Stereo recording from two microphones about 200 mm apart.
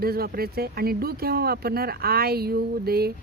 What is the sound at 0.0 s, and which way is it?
Speech, 50° right (ahead or behind).